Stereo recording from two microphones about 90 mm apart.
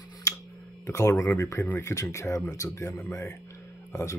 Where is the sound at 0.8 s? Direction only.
35° left (ahead or behind).